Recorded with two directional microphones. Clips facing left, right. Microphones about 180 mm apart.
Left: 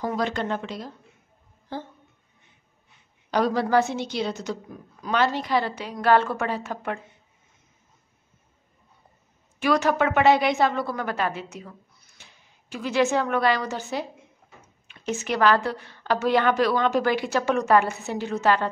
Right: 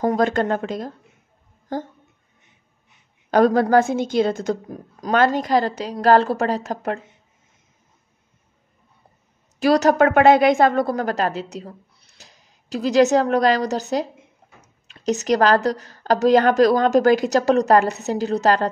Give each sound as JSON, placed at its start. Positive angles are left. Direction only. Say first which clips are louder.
{"t": 0.0, "sound": "speech", "louder": "right 7 dB", "side_deg": -50}
{"t": 3.3, "sound": "a woman's voice", "louder": "right 7 dB", "side_deg": -50}
{"t": 9.6, "sound": "a woman's voice", "louder": "right 6 dB", "side_deg": -40}